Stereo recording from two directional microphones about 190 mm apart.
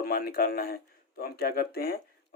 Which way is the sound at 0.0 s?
55° left (ahead or behind).